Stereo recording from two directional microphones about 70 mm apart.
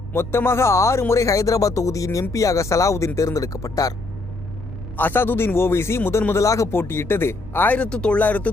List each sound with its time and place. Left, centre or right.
0.1 s speech: left
4.9 s speech: left
6.7 s speech: left
7.9 s speech: centre